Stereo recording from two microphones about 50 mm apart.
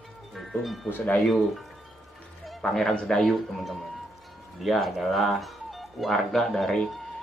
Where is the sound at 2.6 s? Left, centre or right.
Centre.